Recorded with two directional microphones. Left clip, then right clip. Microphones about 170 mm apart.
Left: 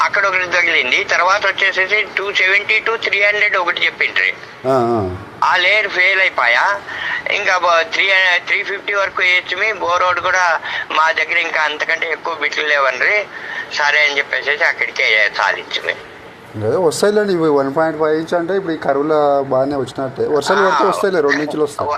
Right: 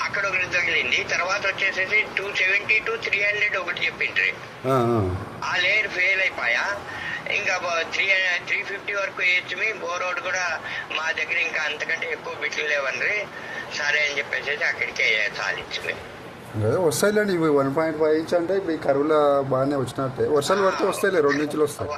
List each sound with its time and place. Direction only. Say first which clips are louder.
0.0 s a man's voice: left 9 dB; 35° left (ahead or behind)
4.6 s speech: left 7 dB; 5° left (ahead or behind)
5.4 s a man's voice: left 9 dB; 35° left (ahead or behind)
16.6 s speech: left 7 dB; 5° left (ahead or behind)
20.6 s a man's voice: left 8 dB; 35° left (ahead or behind)
21.0 s speech: left 5 dB; 5° left (ahead or behind)
21.2 s a man's voice: left 6 dB; 35° left (ahead or behind)